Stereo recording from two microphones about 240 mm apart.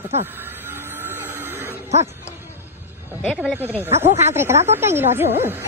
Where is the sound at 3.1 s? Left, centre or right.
Centre.